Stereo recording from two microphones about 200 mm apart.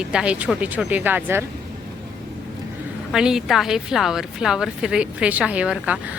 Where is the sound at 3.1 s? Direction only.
5° right (ahead or behind).